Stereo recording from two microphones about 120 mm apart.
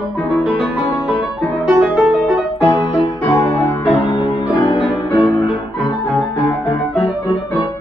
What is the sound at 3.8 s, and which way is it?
Music, 50° left (ahead or behind).